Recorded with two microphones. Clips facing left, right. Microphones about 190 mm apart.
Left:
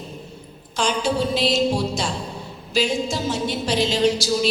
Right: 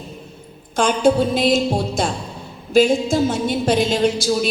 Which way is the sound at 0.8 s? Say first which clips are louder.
Right 6 dB; 50° right (ahead or behind).